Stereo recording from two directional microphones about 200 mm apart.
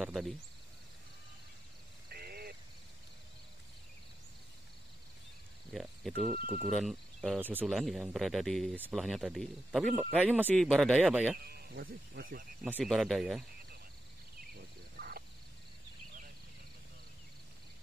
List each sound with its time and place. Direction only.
0.0 s speech: centre (ahead or behind)
2.0 s a sound: 50° right (ahead or behind)
5.7 s speech: centre (ahead or behind)
10.2 s a man's voice: 10° right (ahead or behind)
11.4 s speech: 50° right (ahead or behind)
12.7 s speech: centre (ahead or behind)
14.5 s a sound: 50° right (ahead or behind)